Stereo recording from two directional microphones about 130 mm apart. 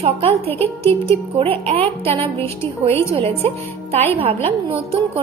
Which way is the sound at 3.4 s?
50° right (ahead or behind).